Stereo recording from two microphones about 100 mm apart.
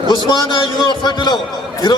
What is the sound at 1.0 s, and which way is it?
Speech, 45° left (ahead or behind).